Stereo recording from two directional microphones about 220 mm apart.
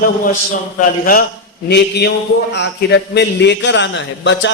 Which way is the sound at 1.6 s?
50° left (ahead or behind).